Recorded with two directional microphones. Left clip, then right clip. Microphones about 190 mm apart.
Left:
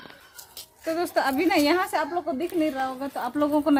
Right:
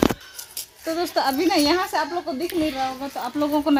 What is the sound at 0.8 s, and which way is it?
A woman's voice, 10° right (ahead or behind).